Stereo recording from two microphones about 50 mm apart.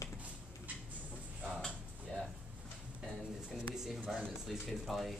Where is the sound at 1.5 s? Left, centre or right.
Centre.